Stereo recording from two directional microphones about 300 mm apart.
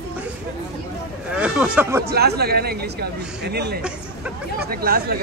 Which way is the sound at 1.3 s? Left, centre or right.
Centre.